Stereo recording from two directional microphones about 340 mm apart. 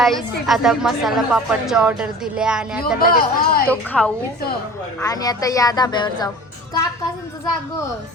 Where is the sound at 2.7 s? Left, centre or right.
Left.